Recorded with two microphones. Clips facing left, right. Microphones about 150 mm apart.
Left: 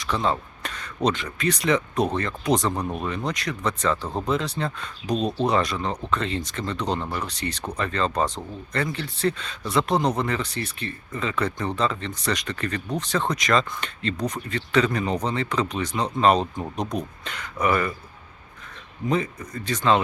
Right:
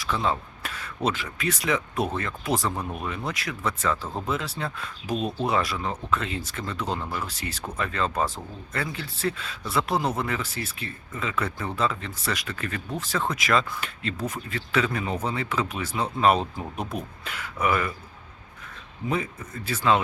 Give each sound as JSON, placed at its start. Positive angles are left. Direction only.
{"t": 0.0, "sound": "speech", "side_deg": -5}
{"t": 19.0, "sound": "speech", "side_deg": -5}